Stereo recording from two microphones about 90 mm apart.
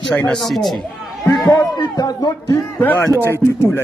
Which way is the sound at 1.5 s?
45° left (ahead or behind).